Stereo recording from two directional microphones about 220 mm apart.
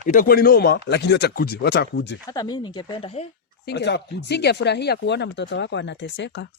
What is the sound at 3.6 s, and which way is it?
Speech, 50° left (ahead or behind).